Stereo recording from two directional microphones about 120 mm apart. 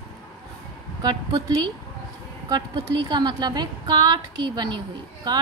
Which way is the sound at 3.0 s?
35° right (ahead or behind).